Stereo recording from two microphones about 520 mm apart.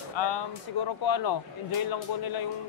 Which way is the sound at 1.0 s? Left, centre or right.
Left.